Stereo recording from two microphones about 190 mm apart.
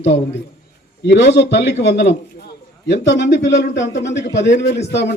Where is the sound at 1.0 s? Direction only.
65° left (ahead or behind).